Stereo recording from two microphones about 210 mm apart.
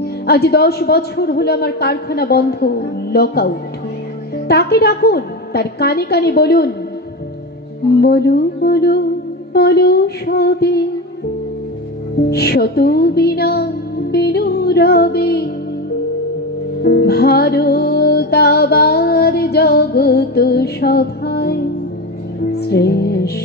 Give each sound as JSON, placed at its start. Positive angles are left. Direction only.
{"t": 0.0, "sound": "a woman's voice", "side_deg": 50}
{"t": 8.0, "sound": "a woman's voice", "side_deg": 50}
{"t": 12.3, "sound": "a woman's voice", "side_deg": 50}
{"t": 16.8, "sound": "music", "side_deg": 45}
{"t": 22.5, "sound": "a woman's voice", "side_deg": 50}